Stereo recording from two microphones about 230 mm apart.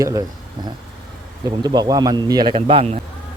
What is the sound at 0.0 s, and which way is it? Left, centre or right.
Speech, centre.